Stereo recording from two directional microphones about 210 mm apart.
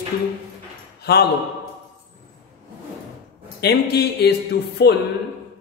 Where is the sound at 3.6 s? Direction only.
50° left (ahead or behind).